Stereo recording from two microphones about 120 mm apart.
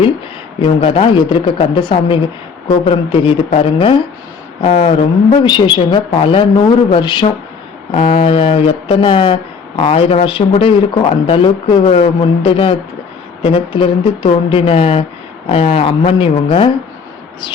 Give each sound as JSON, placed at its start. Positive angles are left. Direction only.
{"t": 0.6, "sound": "speech", "side_deg": 45}
{"t": 5.4, "sound": "speech", "side_deg": 40}